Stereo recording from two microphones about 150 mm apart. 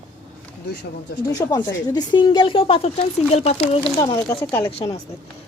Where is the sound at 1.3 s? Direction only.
25° left (ahead or behind); by 3.9 s 40° left (ahead or behind).